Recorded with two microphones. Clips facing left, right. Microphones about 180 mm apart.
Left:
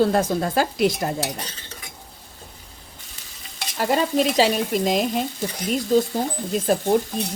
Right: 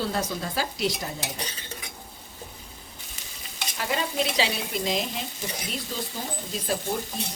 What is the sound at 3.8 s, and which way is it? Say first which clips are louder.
Speech: left 8 dB; 45° left (ahead or behind).